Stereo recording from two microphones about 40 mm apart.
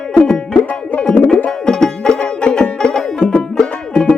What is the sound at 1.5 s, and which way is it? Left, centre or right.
Music, centre.